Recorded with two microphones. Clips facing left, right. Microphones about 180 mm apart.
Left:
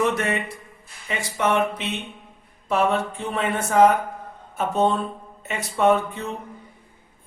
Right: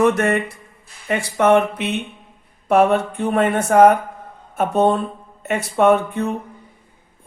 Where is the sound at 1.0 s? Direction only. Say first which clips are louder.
Right 7 dB; 55° right (ahead or behind).